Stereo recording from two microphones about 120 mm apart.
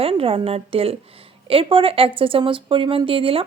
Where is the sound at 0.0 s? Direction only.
50° right (ahead or behind).